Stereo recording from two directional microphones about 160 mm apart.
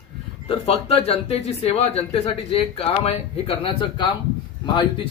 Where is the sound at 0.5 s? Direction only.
40° left (ahead or behind).